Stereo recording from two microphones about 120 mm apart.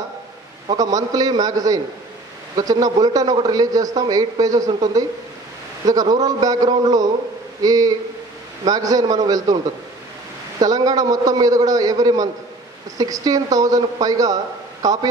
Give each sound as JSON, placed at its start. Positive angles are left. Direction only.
{"t": 0.7, "sound": "a man's voice", "side_deg": -30}
{"t": 10.6, "sound": "a man's voice", "side_deg": -30}